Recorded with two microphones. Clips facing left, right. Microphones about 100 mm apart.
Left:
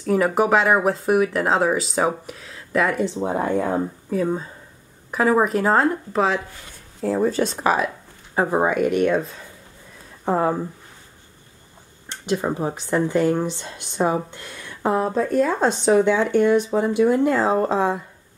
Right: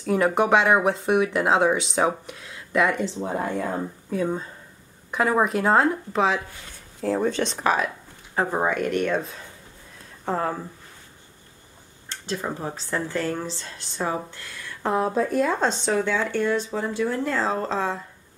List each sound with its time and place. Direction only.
0.0 s speech: centre (ahead or behind)
3.3 s speech: 20° left (ahead or behind)
4.1 s speech: 5° left (ahead or behind)
10.2 s speech: 15° left (ahead or behind)
12.1 s speech: 15° left (ahead or behind)
14.9 s speech: centre (ahead or behind)